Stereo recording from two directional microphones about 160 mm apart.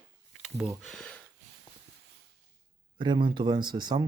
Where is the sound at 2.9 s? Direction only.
30° right (ahead or behind).